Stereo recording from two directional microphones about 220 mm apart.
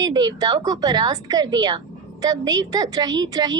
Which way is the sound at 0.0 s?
20° right (ahead or behind).